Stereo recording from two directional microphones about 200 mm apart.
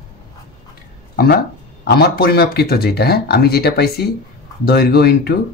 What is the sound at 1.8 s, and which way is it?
Speech, 50° left (ahead or behind).